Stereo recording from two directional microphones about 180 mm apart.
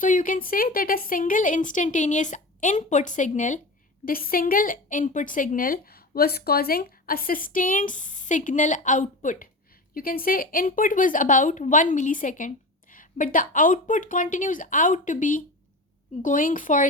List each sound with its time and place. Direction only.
0.0 s speech: 45° left (ahead or behind)